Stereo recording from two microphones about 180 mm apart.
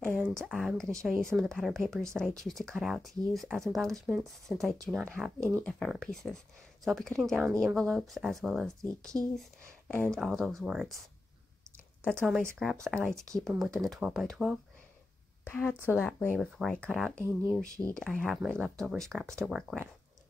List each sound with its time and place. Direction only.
0.4 s speech: centre (ahead or behind)
7.4 s speech: 15° right (ahead or behind)
7.7 s speech: centre (ahead or behind)
12.0 s speech: 5° left (ahead or behind)
15.4 s speech: 10° left (ahead or behind)
17.2 s speech: 15° right (ahead or behind)
17.7 s speech: 5° left (ahead or behind)